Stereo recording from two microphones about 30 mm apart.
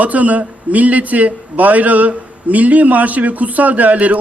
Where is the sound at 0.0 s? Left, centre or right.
Right.